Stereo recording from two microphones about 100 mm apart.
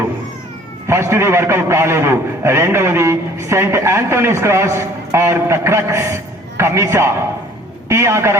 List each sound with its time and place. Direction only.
0.9 s a man's voice: 25° right (ahead or behind)